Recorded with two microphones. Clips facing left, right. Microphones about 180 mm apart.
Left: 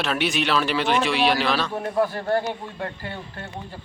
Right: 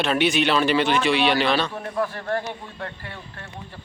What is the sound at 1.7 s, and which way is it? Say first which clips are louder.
A man's voice: left 4 dB; 30° left (ahead or behind).